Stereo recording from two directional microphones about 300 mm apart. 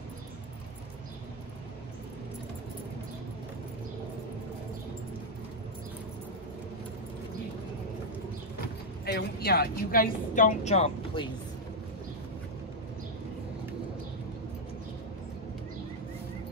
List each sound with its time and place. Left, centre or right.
9.0 s speech: left